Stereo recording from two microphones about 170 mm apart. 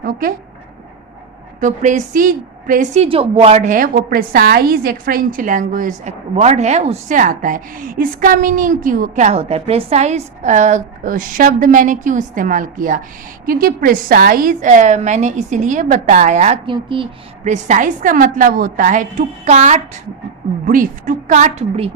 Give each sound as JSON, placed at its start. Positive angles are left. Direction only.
{"t": 0.0, "sound": "speech", "side_deg": -60}
{"t": 1.6, "sound": "a woman's voice", "side_deg": -45}
{"t": 3.0, "sound": "a woman's voice", "side_deg": -35}
{"t": 16.6, "sound": "speech", "side_deg": -30}
{"t": 17.4, "sound": "a woman's voice", "side_deg": -45}